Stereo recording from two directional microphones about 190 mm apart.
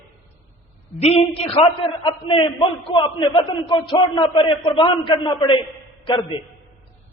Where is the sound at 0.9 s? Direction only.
35° left (ahead or behind).